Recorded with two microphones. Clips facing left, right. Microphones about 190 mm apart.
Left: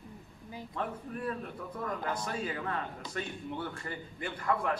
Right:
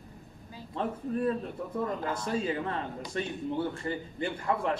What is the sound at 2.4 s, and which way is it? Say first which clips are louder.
A man's voice: right 4 dB; 25° right (ahead or behind).